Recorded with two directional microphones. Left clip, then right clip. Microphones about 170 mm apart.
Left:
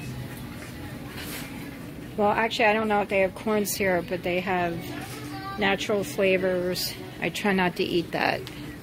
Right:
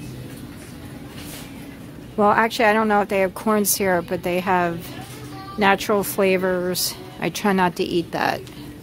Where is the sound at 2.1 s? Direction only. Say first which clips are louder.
Right 6 dB; 35° right (ahead or behind); by 8.4 s 20° right (ahead or behind).